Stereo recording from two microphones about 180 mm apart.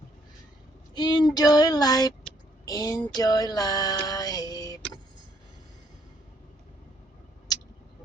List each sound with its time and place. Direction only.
0.9 s speech: 25° left (ahead or behind)
3.2 s female singing: 20° left (ahead or behind)